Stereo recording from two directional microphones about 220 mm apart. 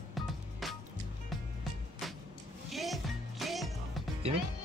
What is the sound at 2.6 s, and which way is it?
Music, centre (ahead or behind).